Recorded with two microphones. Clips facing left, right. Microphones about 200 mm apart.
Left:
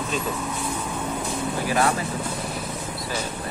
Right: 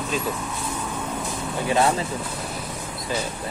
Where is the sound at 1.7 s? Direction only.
25° right (ahead or behind).